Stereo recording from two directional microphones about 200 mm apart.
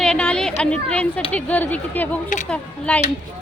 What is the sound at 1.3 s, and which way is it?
Speech, 10° left (ahead or behind).